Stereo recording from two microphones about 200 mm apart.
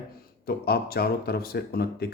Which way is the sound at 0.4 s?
50° left (ahead or behind).